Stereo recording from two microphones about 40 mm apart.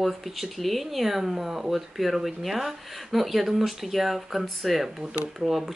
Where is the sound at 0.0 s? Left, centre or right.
Centre.